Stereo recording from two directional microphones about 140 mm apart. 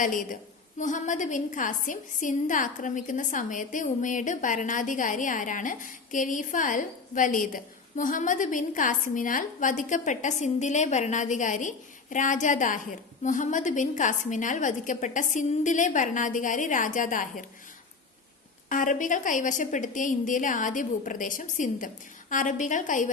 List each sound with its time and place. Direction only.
0.0 s a woman's voice: 70° left (ahead or behind)
18.7 s a woman's voice: 70° left (ahead or behind)